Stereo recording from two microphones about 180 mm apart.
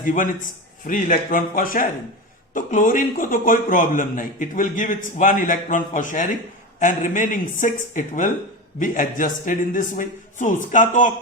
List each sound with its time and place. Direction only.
0.0 s a man's voice: 45° left (ahead or behind)